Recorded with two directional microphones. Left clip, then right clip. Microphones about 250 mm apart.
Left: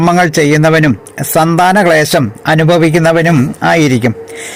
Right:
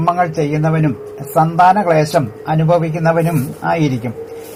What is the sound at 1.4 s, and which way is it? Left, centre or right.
Speech, left.